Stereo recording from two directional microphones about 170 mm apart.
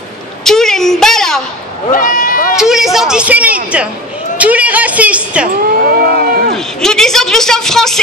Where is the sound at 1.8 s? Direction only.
50° left (ahead or behind).